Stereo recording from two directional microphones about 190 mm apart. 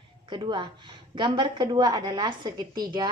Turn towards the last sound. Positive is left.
turn(degrees=-20)  # may be behind; listen again after turning